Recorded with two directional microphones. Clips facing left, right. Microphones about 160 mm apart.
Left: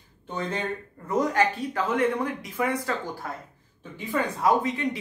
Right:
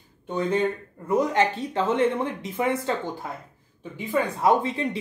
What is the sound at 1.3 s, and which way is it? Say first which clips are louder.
Speech: right 1 dB; 25° right (ahead or behind).